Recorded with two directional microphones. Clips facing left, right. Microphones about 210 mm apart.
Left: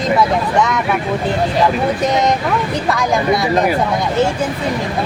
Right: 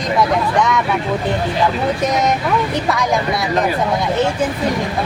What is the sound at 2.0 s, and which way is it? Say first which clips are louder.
Speech: left 1 dB; centre (ahead or behind).